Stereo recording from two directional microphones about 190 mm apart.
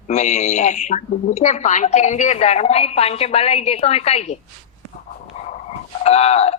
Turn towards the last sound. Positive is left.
turn(degrees=35)  # may be behind; listen again after turning